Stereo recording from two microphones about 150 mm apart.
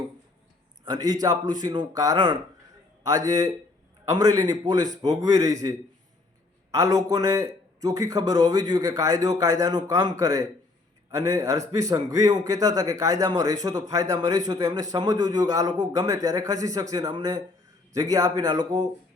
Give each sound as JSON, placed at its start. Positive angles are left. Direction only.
{"t": 0.9, "sound": "speech", "side_deg": -25}
{"t": 6.7, "sound": "speech", "side_deg": -20}